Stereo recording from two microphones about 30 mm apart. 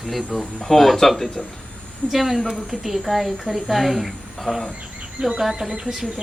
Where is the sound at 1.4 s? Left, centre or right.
Left.